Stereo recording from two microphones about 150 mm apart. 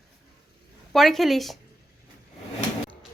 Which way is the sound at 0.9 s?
Centre (ahead or behind).